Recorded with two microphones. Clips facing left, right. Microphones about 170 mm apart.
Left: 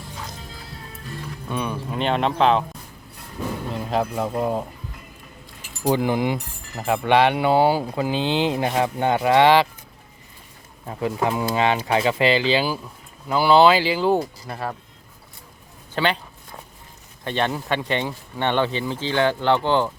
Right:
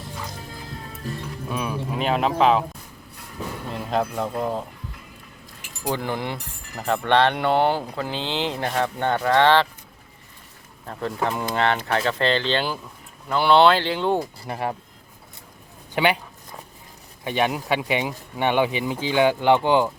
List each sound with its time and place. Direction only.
1.5 s speech: centre (ahead or behind)
3.7 s music: centre (ahead or behind)
4.3 s speech: 10° left (ahead or behind)
5.8 s speech: 15° left (ahead or behind)
10.8 s speech: 10° left (ahead or behind)
14.4 s speech: 20° right (ahead or behind)
16.0 s a sound: 15° right (ahead or behind)
17.2 s speech: 10° right (ahead or behind)